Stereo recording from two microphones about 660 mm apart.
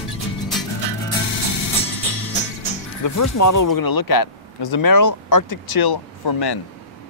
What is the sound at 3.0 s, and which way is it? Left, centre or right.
Speech, left.